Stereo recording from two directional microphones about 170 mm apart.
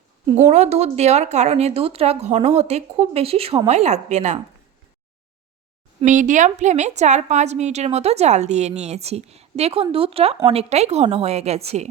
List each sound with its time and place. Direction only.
0.4 s a woman's voice: 40° right (ahead or behind)
6.1 s a woman's voice: 50° right (ahead or behind)